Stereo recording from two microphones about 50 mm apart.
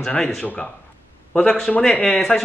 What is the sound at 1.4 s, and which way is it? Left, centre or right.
A man's voice, centre.